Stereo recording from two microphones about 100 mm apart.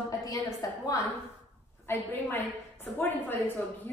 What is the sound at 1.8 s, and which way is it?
A woman's voice, 25° left (ahead or behind).